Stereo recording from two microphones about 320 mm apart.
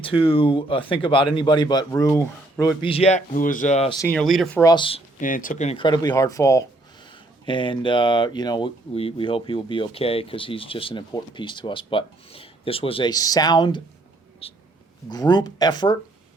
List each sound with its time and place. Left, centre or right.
0.0 s speech: centre
4.0 s speech: centre
4.6 s speech: centre